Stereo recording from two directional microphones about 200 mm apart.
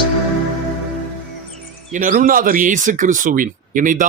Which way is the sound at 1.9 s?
40° right (ahead or behind).